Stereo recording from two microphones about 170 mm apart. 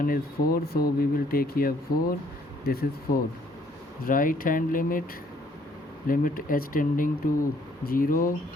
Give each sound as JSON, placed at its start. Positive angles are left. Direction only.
{"t": 0.0, "sound": "speech", "side_deg": 60}
{"t": 6.1, "sound": "speech", "side_deg": 55}